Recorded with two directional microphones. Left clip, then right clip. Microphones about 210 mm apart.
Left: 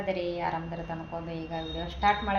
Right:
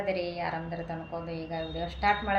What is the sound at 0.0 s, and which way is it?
A woman's voice, 5° left (ahead or behind).